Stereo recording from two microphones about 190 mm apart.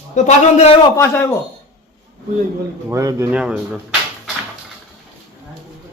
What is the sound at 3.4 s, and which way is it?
Speech, 5° right (ahead or behind).